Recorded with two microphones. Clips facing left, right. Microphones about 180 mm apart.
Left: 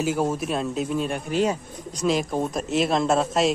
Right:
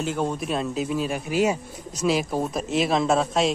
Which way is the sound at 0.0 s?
5° left (ahead or behind).